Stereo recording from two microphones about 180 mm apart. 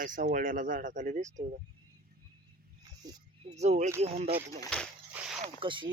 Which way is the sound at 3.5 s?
40° right (ahead or behind).